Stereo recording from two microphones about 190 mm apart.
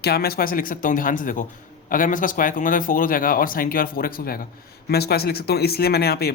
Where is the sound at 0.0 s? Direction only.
55° left (ahead or behind).